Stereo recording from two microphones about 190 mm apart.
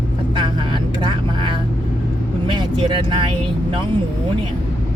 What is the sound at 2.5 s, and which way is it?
Speech, 25° right (ahead or behind).